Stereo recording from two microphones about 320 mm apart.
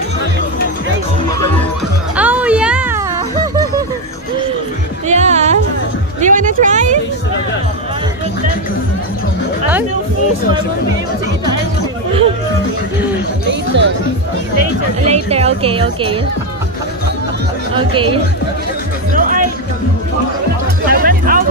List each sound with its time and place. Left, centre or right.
2.1 s a sound: centre
5.0 s music: right
6.2 s a sound: right
13.5 s speech: right
15.0 s a woman's voice: centre
17.7 s speech: centre
20.8 s music: right